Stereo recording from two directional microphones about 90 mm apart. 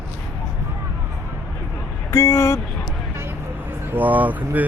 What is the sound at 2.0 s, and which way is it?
Speech, 30° left (ahead or behind).